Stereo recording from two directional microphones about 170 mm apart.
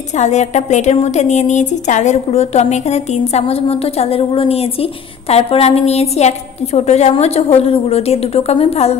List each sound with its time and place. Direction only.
0.2 s a woman's voice: 45° left (ahead or behind)